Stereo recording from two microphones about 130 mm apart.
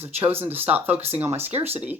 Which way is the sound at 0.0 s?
15° right (ahead or behind).